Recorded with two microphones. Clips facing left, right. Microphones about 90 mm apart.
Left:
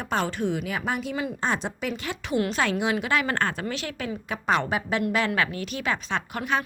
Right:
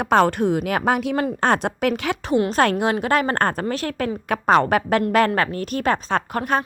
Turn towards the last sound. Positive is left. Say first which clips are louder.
# right 6 dB
turn(degrees=-45)  # may be behind; listen again after turning